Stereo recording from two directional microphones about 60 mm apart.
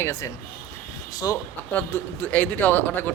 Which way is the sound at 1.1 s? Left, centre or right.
Left.